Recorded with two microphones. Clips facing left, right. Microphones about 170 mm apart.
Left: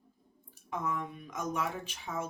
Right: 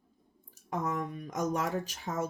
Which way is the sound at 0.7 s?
45° right (ahead or behind).